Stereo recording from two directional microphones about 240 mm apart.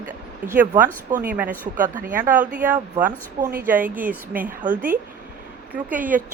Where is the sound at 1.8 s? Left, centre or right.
Right.